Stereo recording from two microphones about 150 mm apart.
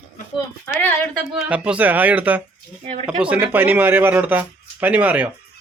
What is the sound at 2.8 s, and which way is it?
Speech, 50° right (ahead or behind).